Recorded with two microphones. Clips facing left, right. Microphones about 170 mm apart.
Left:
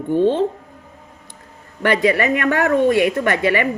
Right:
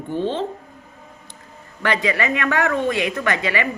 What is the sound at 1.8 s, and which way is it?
Speech, 50° left (ahead or behind).